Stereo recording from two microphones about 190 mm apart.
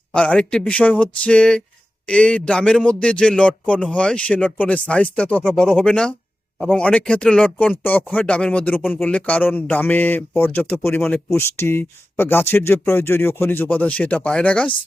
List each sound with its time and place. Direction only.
0.1 s speech: 5° left (ahead or behind)